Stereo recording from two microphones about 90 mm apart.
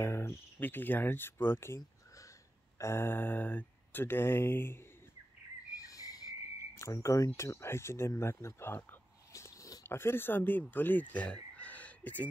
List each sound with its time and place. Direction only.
0.0 s speech: 25° left (ahead or behind)
5.8 s insect: 40° left (ahead or behind)
6.8 s speech: 35° left (ahead or behind)
9.3 s a sound: 35° left (ahead or behind)
9.8 s speech: 25° left (ahead or behind)